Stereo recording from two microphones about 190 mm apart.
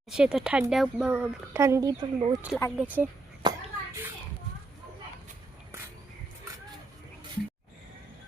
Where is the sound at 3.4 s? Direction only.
20° right (ahead or behind).